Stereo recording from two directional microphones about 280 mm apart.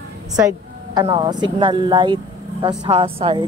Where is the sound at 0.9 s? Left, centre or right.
Centre.